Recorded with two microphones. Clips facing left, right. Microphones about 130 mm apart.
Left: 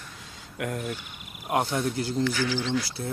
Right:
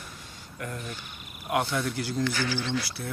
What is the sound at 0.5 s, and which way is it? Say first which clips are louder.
Speech: left 6 dB; 65° left (ahead or behind).